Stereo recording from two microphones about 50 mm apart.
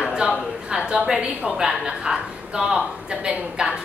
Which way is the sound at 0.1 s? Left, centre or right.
Centre.